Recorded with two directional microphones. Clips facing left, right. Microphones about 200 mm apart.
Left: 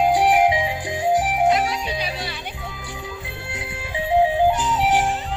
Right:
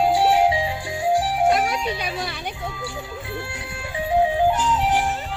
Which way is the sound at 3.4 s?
20° left (ahead or behind).